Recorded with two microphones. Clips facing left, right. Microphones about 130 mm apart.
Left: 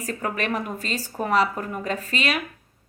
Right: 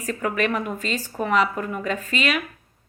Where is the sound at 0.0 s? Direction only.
40° left (ahead or behind).